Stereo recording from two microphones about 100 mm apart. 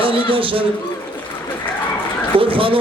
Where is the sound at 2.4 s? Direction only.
65° right (ahead or behind).